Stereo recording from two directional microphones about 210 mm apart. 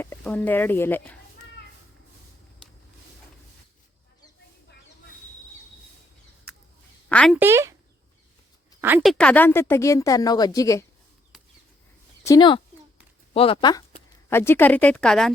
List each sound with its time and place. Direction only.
0.0 s speech: 10° left (ahead or behind)
7.1 s speech: 5° left (ahead or behind)
7.3 s speech: 10° right (ahead or behind)
8.8 s speech: 10° right (ahead or behind)
9.1 s a woman's voice: 5° left (ahead or behind)
12.2 s speech: 20° left (ahead or behind)
14.3 s a woman's voice: 10° left (ahead or behind)